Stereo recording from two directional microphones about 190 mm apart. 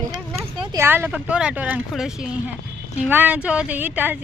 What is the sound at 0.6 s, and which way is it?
Speech, 15° right (ahead or behind).